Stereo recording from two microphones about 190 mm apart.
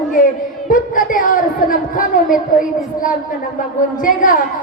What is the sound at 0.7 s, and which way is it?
Speech, 45° left (ahead or behind).